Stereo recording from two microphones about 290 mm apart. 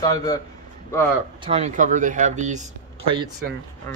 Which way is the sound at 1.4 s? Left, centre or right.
Right.